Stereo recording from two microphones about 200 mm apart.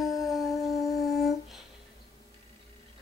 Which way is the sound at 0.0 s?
Centre (ahead or behind).